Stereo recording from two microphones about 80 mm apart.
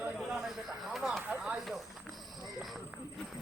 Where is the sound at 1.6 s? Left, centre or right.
Centre.